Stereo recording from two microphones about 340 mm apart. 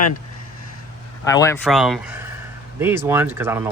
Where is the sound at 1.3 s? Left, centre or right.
Centre.